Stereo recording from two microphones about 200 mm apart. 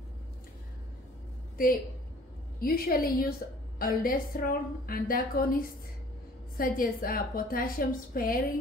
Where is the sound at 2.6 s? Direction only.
50° left (ahead or behind).